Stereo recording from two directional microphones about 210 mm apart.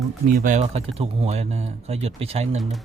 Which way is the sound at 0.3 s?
35° right (ahead or behind).